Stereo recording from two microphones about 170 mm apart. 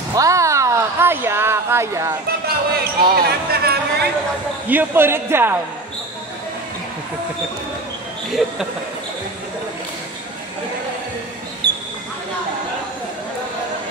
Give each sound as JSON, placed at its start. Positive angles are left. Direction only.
{"t": 0.1, "sound": "speech", "side_deg": -20}
{"t": 2.4, "sound": "speech", "side_deg": -65}
{"t": 4.6, "sound": "a man's voice", "side_deg": -10}
{"t": 8.3, "sound": "speech", "side_deg": 0}
{"t": 11.6, "sound": "a sound", "side_deg": -75}